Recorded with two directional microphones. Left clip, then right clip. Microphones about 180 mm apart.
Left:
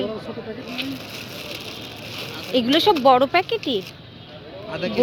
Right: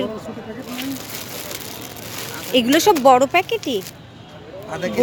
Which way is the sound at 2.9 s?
25° right (ahead or behind).